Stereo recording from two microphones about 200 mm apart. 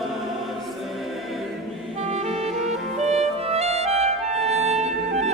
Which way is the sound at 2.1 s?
35° right (ahead or behind).